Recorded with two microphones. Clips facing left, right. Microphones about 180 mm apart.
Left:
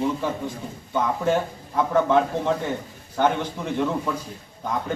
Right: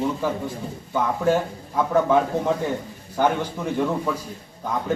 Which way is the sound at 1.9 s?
10° right (ahead or behind).